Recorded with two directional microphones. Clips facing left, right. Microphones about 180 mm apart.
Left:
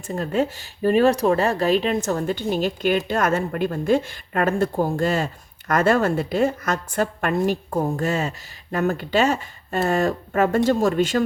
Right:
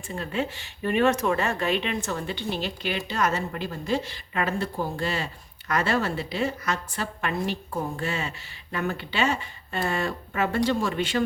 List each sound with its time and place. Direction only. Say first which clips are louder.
0.1 s speech: left 7 dB; 40° left (ahead or behind)